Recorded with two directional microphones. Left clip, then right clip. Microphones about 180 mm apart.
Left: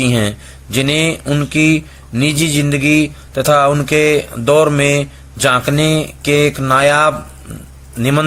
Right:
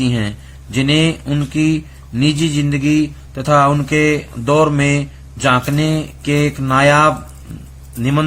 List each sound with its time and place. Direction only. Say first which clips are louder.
0.0 s speech: left 5 dB; 25° left (ahead or behind)